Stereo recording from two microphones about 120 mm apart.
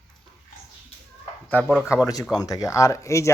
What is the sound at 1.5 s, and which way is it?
Speech, 10° left (ahead or behind).